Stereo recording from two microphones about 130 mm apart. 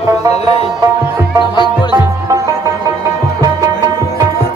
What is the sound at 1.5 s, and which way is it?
Music, 35° left (ahead or behind).